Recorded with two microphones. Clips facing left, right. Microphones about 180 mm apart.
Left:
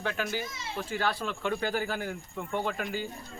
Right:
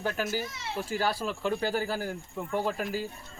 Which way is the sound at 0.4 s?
60° right (ahead or behind).